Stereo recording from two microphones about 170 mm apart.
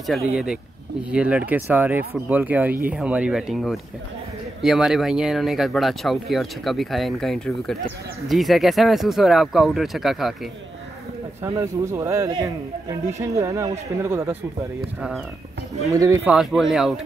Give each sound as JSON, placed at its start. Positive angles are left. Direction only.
{"t": 0.3, "sound": "speech", "side_deg": -5}
{"t": 11.4, "sound": "speech", "side_deg": -15}
{"t": 15.9, "sound": "speech", "side_deg": -20}
{"t": 16.3, "sound": "speech", "side_deg": -5}